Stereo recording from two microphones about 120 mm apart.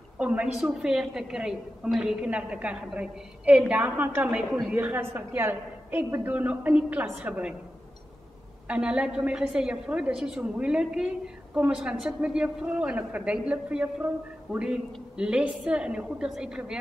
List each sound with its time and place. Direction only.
0.2 s a woman's voice: 10° right (ahead or behind)
4.4 s a woman's voice: 5° right (ahead or behind)
4.7 s a woman's voice: 15° right (ahead or behind)
8.6 s a woman's voice: 10° right (ahead or behind)